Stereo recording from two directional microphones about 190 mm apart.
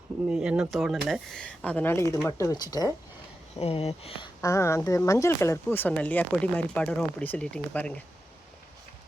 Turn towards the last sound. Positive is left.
turn(degrees=5)  # may be behind; listen again after turning